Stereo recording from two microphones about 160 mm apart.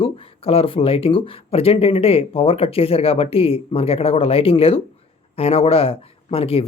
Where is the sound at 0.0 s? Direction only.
35° left (ahead or behind).